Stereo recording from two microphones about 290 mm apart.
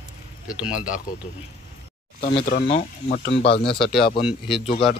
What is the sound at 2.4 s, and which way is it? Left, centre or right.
Speech, left.